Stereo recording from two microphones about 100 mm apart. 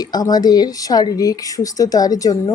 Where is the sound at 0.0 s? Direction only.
40° left (ahead or behind).